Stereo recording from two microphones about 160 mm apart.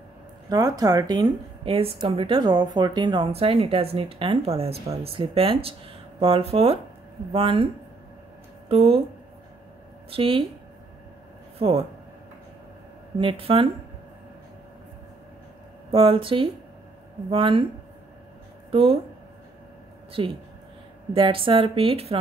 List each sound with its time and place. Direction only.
0.5 s speech: 20° right (ahead or behind)
8.6 s speech: 35° right (ahead or behind)
10.0 s a woman's voice: 35° right (ahead or behind)
11.5 s a sound: 35° right (ahead or behind)
13.2 s speech: 35° right (ahead or behind)
15.9 s speech: 35° right (ahead or behind)
18.7 s speech: 35° right (ahead or behind)
20.1 s speech: 35° right (ahead or behind)